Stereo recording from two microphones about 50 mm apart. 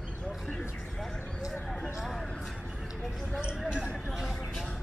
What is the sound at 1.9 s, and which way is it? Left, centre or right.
Speech, centre.